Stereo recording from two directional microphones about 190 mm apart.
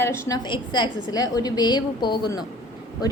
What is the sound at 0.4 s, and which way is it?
A woman's voice, 25° left (ahead or behind).